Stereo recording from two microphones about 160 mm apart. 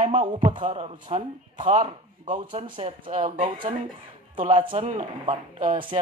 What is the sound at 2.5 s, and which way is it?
Speech, 35° right (ahead or behind).